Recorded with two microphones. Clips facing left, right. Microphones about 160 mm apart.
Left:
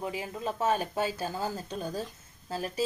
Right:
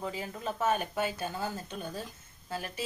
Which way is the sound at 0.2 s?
25° left (ahead or behind).